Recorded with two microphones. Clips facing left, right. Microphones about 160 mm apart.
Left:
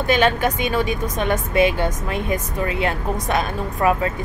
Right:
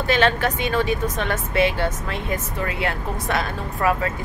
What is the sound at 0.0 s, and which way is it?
A woman's voice, 15° left (ahead or behind).